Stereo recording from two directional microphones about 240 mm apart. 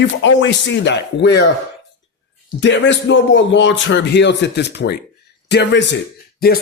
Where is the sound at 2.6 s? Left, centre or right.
Left.